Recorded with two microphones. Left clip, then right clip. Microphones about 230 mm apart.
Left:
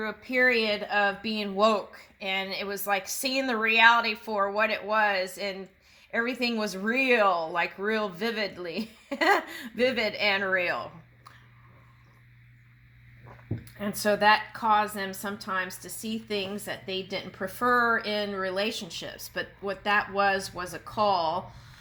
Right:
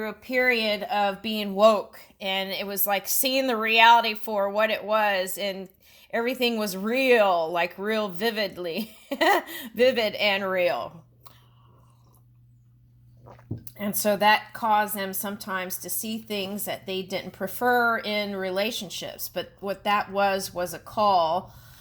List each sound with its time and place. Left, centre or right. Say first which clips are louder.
0.0 s speech: even; right
13.7 s speech: right 2 dB; right